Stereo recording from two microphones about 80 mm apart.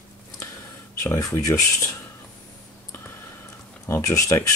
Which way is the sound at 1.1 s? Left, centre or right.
Left.